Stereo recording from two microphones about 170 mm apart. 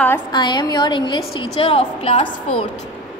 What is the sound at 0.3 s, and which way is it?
A woman's voice, 25° left (ahead or behind).